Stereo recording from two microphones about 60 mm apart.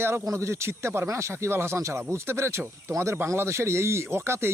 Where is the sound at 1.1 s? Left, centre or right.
Right.